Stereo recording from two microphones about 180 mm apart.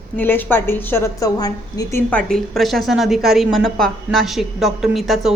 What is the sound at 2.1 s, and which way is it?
A woman's voice, 5° left (ahead or behind).